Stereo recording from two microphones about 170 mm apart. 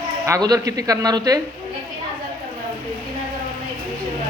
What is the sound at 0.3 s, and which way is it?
A man's voice, 20° right (ahead or behind).